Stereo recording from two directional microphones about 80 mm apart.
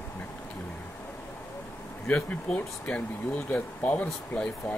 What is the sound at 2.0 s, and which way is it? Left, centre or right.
Speech, left.